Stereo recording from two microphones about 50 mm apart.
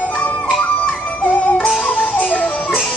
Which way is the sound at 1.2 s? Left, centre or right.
Left.